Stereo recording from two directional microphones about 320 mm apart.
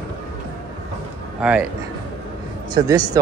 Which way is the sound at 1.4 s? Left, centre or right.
Centre.